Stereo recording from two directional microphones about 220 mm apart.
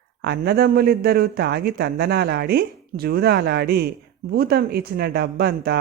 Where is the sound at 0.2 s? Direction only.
45° right (ahead or behind).